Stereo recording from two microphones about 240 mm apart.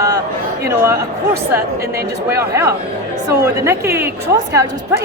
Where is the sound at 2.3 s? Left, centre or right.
Centre.